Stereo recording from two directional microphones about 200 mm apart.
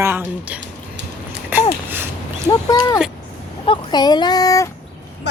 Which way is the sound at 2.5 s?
15° left (ahead or behind).